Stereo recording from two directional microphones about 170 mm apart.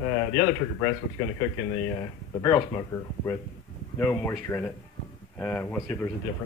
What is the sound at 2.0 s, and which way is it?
Speech, 20° left (ahead or behind).